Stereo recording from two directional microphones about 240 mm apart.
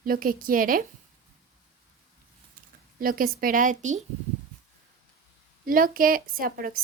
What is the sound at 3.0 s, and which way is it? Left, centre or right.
Speech, right.